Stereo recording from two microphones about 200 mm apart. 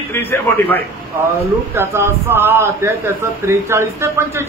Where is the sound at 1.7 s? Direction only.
10° right (ahead or behind).